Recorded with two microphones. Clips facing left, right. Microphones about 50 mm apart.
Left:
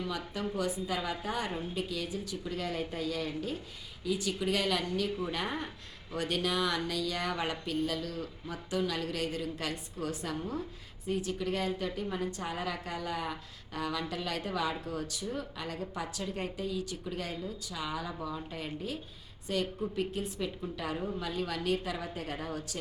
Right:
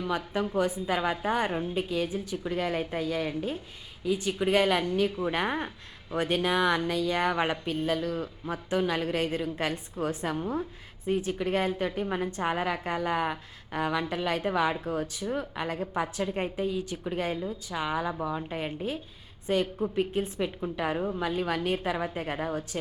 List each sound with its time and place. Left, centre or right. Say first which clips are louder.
0.5 s a woman's voice: right 5 dB; right